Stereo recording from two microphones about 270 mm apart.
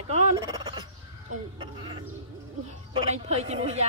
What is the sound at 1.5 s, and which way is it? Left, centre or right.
Music, centre.